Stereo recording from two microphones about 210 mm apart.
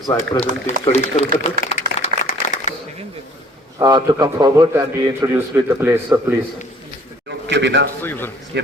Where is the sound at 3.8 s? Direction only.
20° right (ahead or behind).